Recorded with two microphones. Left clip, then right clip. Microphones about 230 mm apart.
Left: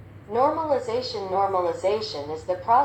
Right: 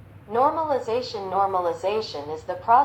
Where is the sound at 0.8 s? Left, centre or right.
Right.